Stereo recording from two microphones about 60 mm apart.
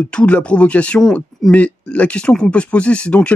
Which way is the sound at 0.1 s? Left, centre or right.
Centre.